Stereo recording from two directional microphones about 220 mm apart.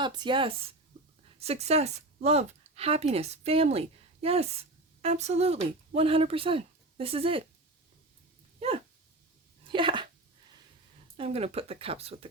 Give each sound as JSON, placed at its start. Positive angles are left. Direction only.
{"t": 0.0, "sound": "speech", "side_deg": -20}
{"t": 8.5, "sound": "dog", "side_deg": -25}
{"t": 11.2, "sound": "speech", "side_deg": -30}